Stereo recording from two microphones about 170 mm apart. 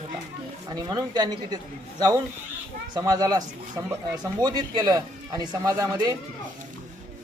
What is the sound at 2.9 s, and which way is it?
Speech, 20° right (ahead or behind).